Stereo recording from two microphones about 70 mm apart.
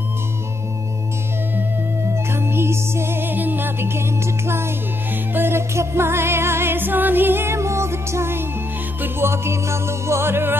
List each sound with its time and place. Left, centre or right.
2.3 s music: right
5.3 s music: right